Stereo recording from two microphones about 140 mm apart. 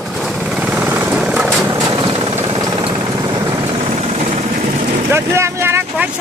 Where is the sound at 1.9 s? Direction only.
45° right (ahead or behind).